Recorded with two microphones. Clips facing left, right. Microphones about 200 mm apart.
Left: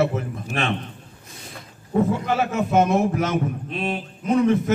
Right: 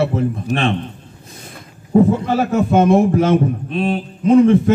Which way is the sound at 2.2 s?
35° right (ahead or behind).